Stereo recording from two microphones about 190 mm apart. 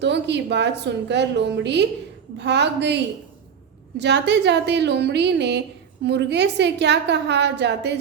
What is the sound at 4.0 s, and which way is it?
A woman's voice, 65° right (ahead or behind).